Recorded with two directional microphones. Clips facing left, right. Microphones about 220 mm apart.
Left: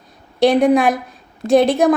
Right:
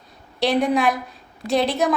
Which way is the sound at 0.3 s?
50° left (ahead or behind).